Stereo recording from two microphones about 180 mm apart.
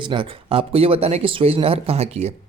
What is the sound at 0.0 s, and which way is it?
Speech, 25° right (ahead or behind).